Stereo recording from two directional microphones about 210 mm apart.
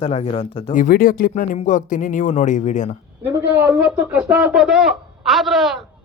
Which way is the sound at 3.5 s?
5° right (ahead or behind).